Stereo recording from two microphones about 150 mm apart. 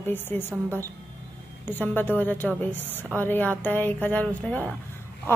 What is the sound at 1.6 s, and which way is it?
A woman's voice, 10° left (ahead or behind).